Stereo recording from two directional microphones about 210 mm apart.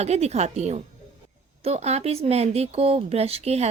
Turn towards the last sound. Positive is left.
turn(degrees=-30)  # may be behind; listen again after turning